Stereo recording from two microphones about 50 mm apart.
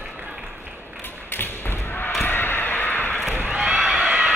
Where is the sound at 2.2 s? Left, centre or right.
Left.